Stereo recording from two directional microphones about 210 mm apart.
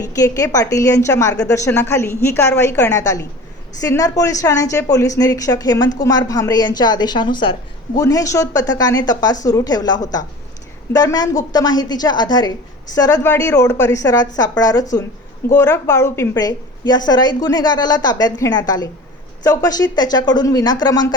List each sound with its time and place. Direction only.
0.0 s a woman's voice: 15° left (ahead or behind)